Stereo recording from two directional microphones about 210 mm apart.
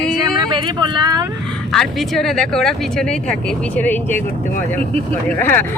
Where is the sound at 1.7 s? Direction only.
Centre (ahead or behind).